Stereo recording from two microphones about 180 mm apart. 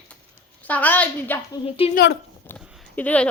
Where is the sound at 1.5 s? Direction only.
30° left (ahead or behind).